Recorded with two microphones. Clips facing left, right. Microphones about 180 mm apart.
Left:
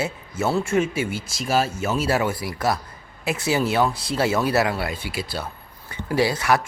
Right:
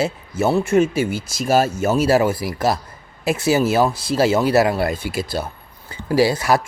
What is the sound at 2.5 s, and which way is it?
Speech, 25° right (ahead or behind).